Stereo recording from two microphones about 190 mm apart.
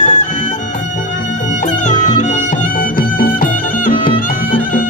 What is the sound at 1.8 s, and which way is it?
Music, 40° left (ahead or behind).